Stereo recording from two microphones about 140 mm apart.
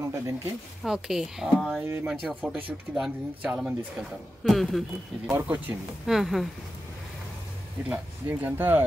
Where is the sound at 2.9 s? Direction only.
5° right (ahead or behind).